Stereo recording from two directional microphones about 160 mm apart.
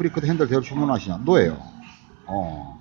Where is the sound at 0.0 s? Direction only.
15° left (ahead or behind).